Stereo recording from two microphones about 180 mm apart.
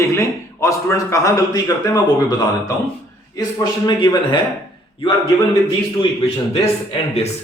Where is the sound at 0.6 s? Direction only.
15° left (ahead or behind).